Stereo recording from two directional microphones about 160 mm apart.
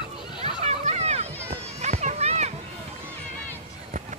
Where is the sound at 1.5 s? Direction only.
45° right (ahead or behind).